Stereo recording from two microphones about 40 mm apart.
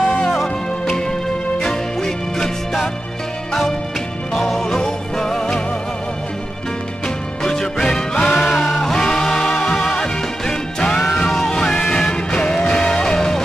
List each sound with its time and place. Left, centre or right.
0.0 s music: centre
1.6 s music: centre
4.6 s music: centre
7.4 s music: centre
11.2 s music: centre
11.5 s music: centre